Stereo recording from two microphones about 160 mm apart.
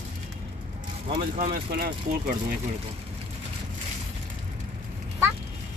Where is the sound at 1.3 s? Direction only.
60° right (ahead or behind).